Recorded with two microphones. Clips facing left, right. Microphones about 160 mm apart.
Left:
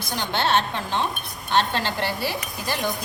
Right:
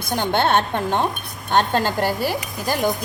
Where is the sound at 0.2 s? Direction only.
50° right (ahead or behind).